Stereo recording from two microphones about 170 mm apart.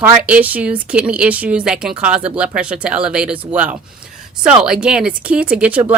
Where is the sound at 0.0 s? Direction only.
10° right (ahead or behind).